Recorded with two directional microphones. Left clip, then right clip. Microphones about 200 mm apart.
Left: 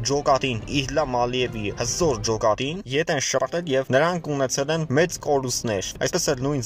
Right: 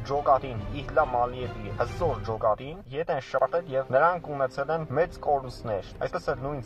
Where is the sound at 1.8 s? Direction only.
15° left (ahead or behind).